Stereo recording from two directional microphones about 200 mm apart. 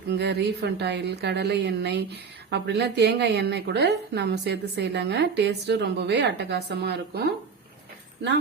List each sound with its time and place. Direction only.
0.1 s a woman's voice: 55° right (ahead or behind)